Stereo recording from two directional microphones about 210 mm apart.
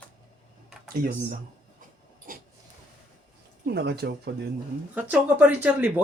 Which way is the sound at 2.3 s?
40° right (ahead or behind).